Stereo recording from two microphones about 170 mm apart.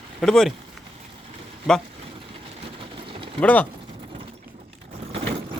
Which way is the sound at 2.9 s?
30° right (ahead or behind).